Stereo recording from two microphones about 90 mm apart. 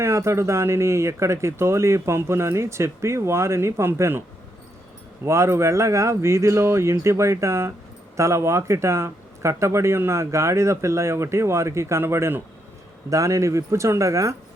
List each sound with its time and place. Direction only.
0.0 s speech: 30° right (ahead or behind)
5.2 s speech: 30° right (ahead or behind)